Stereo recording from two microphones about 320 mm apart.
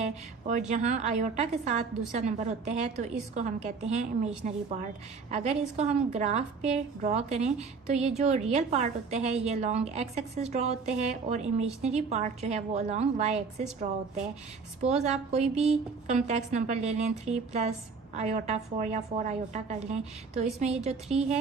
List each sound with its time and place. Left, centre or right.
0.7 s a woman's voice: right
14.8 s a woman's voice: right
20.9 s speech: centre